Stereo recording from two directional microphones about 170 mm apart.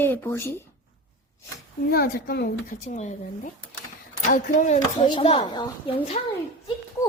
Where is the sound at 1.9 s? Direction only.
65° left (ahead or behind); by 3.1 s 45° left (ahead or behind).